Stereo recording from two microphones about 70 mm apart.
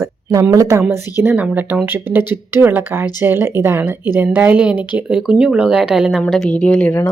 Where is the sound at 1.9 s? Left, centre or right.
Right.